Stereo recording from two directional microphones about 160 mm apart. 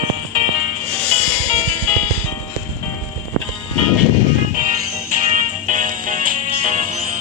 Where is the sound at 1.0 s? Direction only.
5° left (ahead or behind).